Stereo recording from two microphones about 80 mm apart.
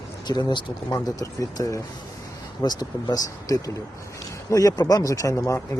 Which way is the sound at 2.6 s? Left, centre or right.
Left.